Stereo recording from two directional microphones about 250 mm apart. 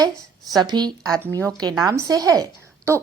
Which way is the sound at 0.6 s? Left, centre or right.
Centre.